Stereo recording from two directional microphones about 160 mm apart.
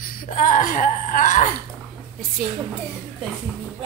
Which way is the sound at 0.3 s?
55° left (ahead or behind).